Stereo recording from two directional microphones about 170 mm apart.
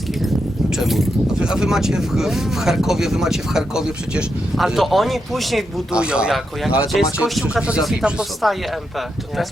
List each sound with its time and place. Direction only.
0.7 s speech: centre (ahead or behind)